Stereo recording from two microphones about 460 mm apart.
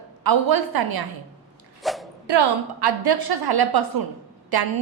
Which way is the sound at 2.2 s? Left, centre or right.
Right.